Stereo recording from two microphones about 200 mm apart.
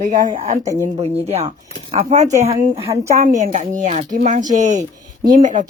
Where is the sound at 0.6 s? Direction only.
15° right (ahead or behind).